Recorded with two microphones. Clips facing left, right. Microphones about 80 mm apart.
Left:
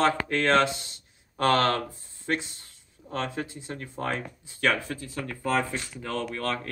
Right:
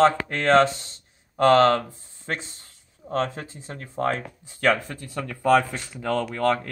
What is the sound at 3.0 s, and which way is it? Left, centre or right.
Speech, right.